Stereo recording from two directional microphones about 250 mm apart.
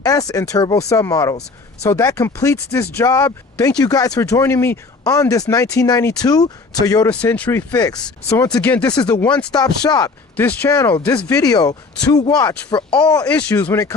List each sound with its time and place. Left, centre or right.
0.0 s speech: centre
8.9 s speech: centre